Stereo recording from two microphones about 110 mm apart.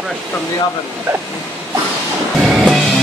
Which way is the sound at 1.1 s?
15° right (ahead or behind).